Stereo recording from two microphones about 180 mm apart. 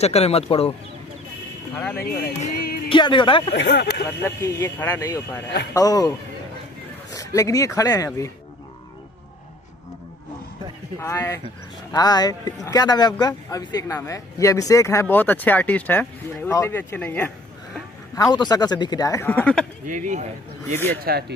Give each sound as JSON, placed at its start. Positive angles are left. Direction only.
{"t": 0.0, "sound": "speech", "side_deg": 35}
{"t": 1.8, "sound": "speech", "side_deg": 10}
{"t": 2.0, "sound": "speech", "side_deg": 55}
{"t": 2.9, "sound": "speech", "side_deg": 25}
{"t": 3.5, "sound": "speech", "side_deg": 75}
{"t": 4.2, "sound": "speech", "side_deg": 15}
{"t": 7.2, "sound": "speech", "side_deg": 20}
{"t": 11.0, "sound": "speech", "side_deg": 15}
{"t": 18.1, "sound": "speech", "side_deg": 20}
{"t": 19.9, "sound": "speech", "side_deg": -45}
{"t": 21.0, "sound": "speech", "side_deg": -60}